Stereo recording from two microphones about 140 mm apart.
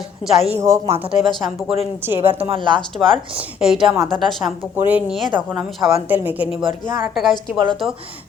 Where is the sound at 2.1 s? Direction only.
15° right (ahead or behind).